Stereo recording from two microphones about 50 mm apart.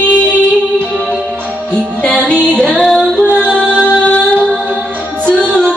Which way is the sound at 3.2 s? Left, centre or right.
Left.